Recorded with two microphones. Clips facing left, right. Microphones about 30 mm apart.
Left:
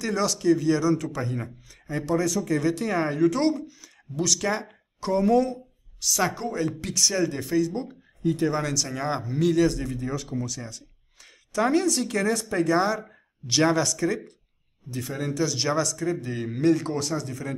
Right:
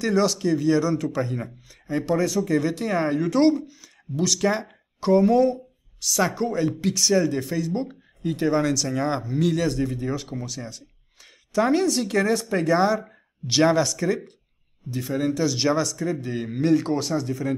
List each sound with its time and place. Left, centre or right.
0.0 s a man's voice: centre
1.9 s a man's voice: centre
7.7 s speech: right
8.5 s a man's voice: centre